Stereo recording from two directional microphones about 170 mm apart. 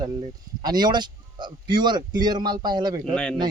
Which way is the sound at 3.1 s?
5° left (ahead or behind).